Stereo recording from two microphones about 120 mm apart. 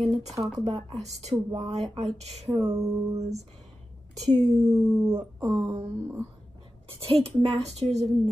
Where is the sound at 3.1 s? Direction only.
65° right (ahead or behind).